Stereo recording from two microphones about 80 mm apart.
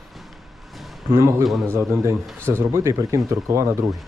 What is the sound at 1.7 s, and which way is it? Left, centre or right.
Speech, right.